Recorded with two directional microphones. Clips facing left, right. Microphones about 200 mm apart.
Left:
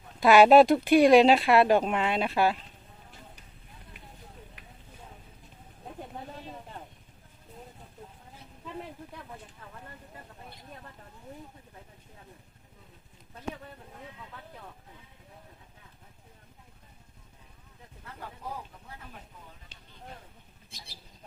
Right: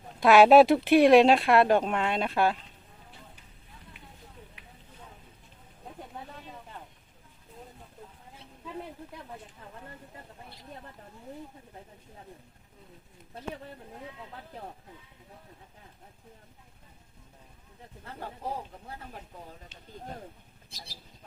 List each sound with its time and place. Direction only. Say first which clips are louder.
0.2 s speech: even; centre (ahead or behind)
18.0 s a sound: right 4 dB; 30° right (ahead or behind)
20.7 s speech: right 3 dB; 40° right (ahead or behind)